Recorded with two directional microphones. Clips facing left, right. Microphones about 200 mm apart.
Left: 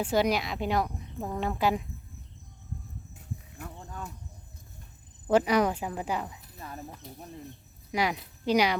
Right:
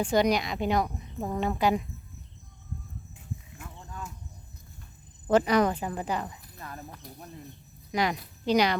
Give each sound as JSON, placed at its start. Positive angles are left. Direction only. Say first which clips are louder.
{"t": 0.0, "sound": "a woman's voice", "louder": "right 2 dB", "side_deg": 5}
{"t": 3.2, "sound": "a sound", "louder": "left 1 dB", "side_deg": 40}
{"t": 5.3, "sound": "speech", "louder": "right 1 dB", "side_deg": 10}